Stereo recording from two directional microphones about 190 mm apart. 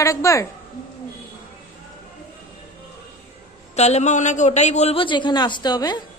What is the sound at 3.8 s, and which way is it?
A man's voice, 35° left (ahead or behind).